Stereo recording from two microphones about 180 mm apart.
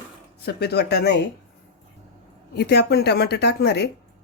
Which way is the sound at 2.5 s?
65° left (ahead or behind).